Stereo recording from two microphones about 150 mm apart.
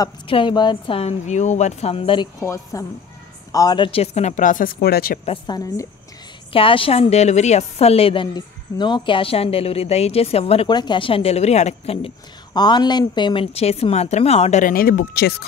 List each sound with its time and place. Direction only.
0.3 s a woman's voice: 35° left (ahead or behind)
2.4 s a woman's voice: 20° left (ahead or behind); by 5.2 s 85° left
5.5 s a woman's voice: 20° left (ahead or behind)
6.5 s a woman's voice: 35° left (ahead or behind)
12.5 s speech: 30° left (ahead or behind); by 15.4 s 90° left